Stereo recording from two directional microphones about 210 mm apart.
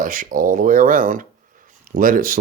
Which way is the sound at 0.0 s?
40° right (ahead or behind).